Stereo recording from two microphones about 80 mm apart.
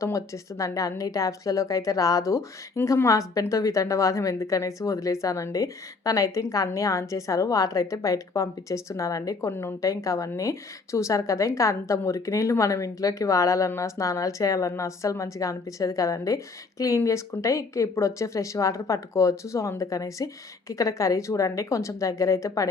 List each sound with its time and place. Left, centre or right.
0.0 s a woman's voice: left
9.5 s speech: left
9.8 s a woman's voice: left